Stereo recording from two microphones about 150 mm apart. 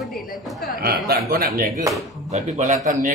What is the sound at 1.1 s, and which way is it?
Speech, 80° right.